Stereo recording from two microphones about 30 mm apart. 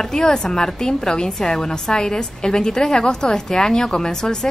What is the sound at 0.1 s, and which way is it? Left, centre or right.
A woman's voice, left.